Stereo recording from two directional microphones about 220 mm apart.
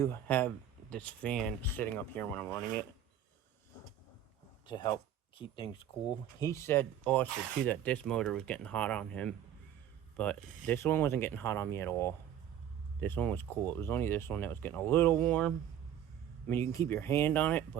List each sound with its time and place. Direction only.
0.0 s speech: 10° left (ahead or behind)
4.6 s speech: 20° left (ahead or behind)
6.4 s speech: 15° left (ahead or behind)